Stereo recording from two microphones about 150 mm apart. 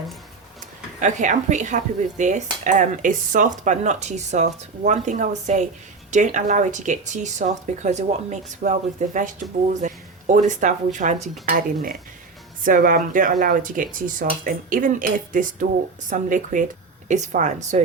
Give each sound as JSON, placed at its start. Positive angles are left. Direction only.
{"t": 0.9, "sound": "speech", "side_deg": -55}